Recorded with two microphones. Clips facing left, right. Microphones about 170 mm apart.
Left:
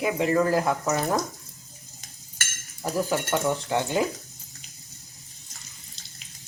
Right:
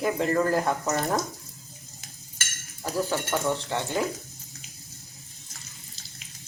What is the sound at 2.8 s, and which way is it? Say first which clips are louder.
Speech: left 2 dB; 15° left (ahead or behind).